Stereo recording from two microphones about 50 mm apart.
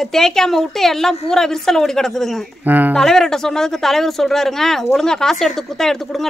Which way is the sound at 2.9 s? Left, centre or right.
Centre.